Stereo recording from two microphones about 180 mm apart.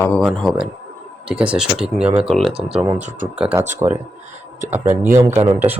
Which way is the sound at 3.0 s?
40° right (ahead or behind).